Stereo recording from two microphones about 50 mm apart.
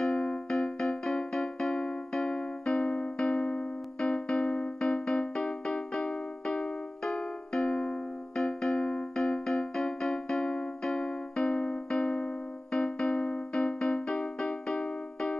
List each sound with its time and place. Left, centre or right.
0.1 s music: left
0.5 s music: centre